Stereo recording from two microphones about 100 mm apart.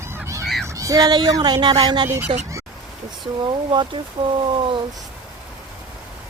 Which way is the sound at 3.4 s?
50° right (ahead or behind).